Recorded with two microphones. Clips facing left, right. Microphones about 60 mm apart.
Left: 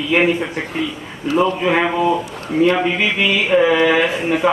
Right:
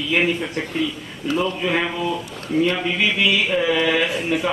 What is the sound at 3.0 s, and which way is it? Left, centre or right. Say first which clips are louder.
A man's voice: left 2 dB; centre.